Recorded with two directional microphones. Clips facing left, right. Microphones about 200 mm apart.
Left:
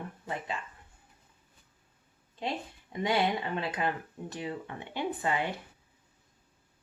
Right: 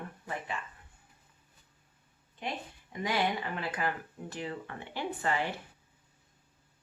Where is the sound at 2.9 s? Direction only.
25° left (ahead or behind).